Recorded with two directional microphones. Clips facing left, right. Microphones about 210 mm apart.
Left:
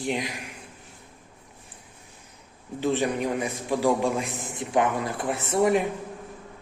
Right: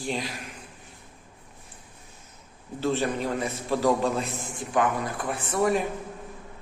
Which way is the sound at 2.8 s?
15° left (ahead or behind).